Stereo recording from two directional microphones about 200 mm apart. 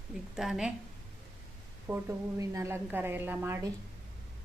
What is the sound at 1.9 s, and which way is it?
A woman's voice, 15° right (ahead or behind).